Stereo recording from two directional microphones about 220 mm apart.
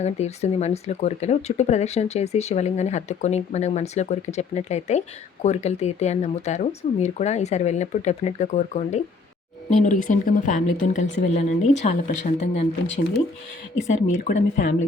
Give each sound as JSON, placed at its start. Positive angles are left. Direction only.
{"t": 0.0, "sound": "speech", "side_deg": 30}
{"t": 13.7, "sound": "speech", "side_deg": 30}